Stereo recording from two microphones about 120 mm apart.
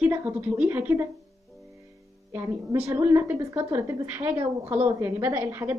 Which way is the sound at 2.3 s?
25° right (ahead or behind).